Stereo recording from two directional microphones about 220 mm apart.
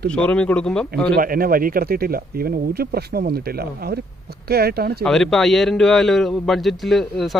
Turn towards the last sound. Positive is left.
turn(degrees=0)  # may be behind; listen again after turning